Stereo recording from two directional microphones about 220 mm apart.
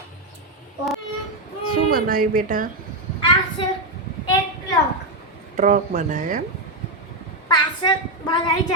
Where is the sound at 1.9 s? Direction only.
40° right (ahead or behind).